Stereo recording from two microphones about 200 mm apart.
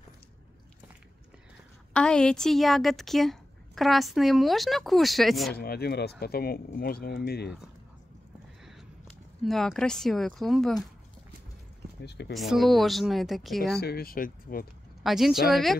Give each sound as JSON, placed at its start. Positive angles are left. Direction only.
{"t": 2.0, "sound": "a woman's voice", "side_deg": 5}
{"t": 5.6, "sound": "speech", "side_deg": 50}
{"t": 9.4, "sound": "a woman's voice", "side_deg": 0}
{"t": 12.0, "sound": "speech", "side_deg": 55}
{"t": 12.3, "sound": "a woman's voice", "side_deg": 0}
{"t": 13.7, "sound": "speech", "side_deg": 50}
{"t": 15.0, "sound": "a woman's voice", "side_deg": 0}